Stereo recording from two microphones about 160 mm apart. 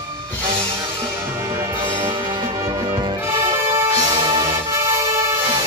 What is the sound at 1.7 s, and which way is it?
Music, 30° right (ahead or behind).